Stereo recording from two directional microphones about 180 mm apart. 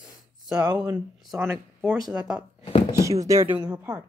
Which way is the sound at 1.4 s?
10° right (ahead or behind).